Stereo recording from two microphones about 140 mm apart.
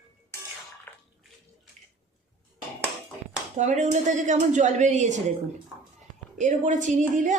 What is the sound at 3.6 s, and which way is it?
A woman's voice, 55° right (ahead or behind).